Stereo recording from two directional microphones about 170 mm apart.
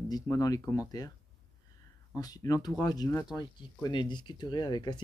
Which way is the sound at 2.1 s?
20° left (ahead or behind).